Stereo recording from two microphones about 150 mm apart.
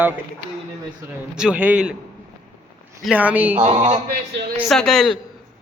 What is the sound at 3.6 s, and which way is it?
Speech, 45° right (ahead or behind).